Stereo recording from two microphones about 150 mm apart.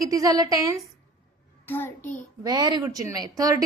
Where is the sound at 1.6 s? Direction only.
10° left (ahead or behind).